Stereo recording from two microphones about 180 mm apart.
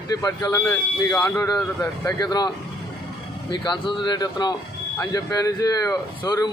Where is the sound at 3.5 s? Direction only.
25° left (ahead or behind).